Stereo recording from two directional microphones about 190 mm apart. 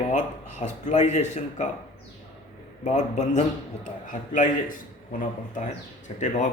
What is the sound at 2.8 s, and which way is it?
A man's voice, 40° left (ahead or behind).